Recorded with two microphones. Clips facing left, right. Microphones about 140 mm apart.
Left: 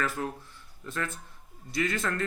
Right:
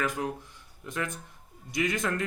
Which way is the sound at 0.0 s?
15° right (ahead or behind).